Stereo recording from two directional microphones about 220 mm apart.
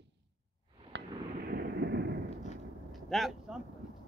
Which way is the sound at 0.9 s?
50° right (ahead or behind).